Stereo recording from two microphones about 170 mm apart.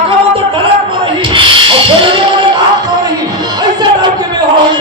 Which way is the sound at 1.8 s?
30° right (ahead or behind).